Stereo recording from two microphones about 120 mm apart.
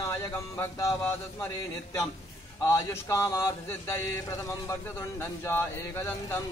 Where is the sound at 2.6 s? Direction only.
25° left (ahead or behind).